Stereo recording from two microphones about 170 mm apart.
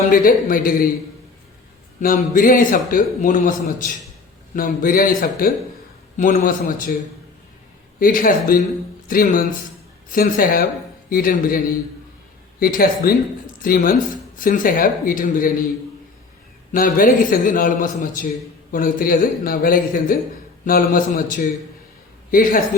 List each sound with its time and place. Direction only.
0.1 s a man's voice: 55° left (ahead or behind)
2.0 s a man's voice: 55° left (ahead or behind)
7.9 s a man's voice: 55° left (ahead or behind)
16.7 s a man's voice: 55° left (ahead or behind)